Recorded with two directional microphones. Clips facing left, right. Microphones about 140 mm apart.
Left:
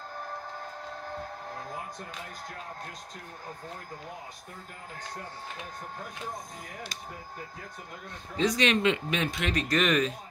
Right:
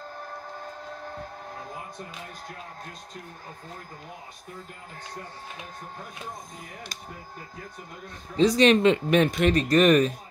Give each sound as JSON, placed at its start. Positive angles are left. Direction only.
{"t": 8.4, "sound": "speech", "side_deg": -35}